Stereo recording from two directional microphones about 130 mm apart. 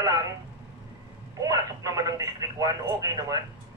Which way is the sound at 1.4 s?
25° right (ahead or behind).